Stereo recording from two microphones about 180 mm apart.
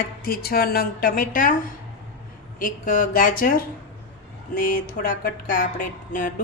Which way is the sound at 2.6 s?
50° left (ahead or behind).